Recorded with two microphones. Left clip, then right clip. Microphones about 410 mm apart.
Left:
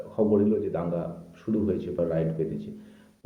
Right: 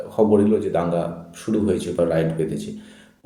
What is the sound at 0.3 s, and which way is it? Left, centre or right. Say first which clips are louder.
Speech: right 6 dB; left.